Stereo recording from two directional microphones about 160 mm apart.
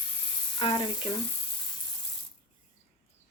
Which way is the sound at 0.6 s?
30° left (ahead or behind).